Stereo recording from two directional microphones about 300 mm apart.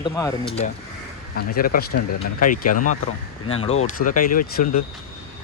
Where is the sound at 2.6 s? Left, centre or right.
Left.